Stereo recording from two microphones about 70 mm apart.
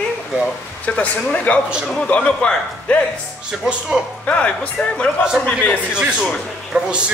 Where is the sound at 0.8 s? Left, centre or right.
Left.